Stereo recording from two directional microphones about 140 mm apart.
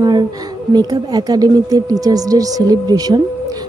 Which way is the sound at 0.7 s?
30° right (ahead or behind).